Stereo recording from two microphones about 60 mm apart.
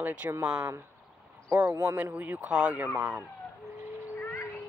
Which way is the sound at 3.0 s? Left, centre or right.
Right.